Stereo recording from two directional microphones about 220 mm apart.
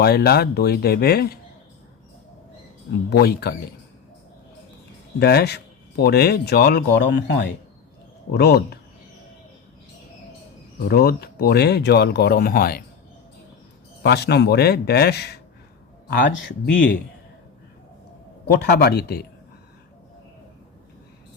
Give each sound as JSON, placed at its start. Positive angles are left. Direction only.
{"t": 0.0, "sound": "speech", "side_deg": 45}
{"t": 2.9, "sound": "speech", "side_deg": 45}
{"t": 5.2, "sound": "speech", "side_deg": 45}
{"t": 10.8, "sound": "speech", "side_deg": 45}
{"t": 14.0, "sound": "a man's voice", "side_deg": 50}
{"t": 18.6, "sound": "speech", "side_deg": 45}